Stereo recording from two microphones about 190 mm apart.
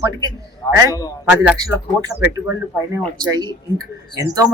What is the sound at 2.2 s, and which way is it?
Speech, 10° right (ahead or behind).